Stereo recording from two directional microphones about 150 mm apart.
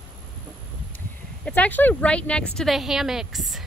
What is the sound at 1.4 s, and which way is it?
A woman's voice, 10° left (ahead or behind).